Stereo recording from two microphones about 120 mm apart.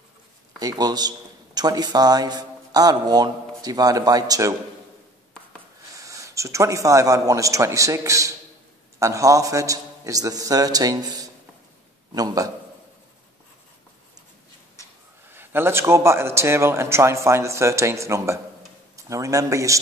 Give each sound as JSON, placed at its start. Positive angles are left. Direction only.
{"t": 0.6, "sound": "a man's voice", "side_deg": -35}
{"t": 5.9, "sound": "a man's voice", "side_deg": -25}
{"t": 15.2, "sound": "a man's voice", "side_deg": -20}